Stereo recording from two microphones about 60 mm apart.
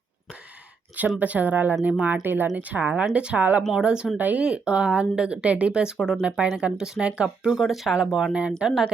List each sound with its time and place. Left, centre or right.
1.2 s speech: right
4.2 s speech: right
7.5 s speech: centre